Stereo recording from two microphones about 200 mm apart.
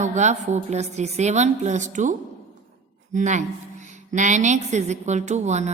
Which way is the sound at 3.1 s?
35° right (ahead or behind).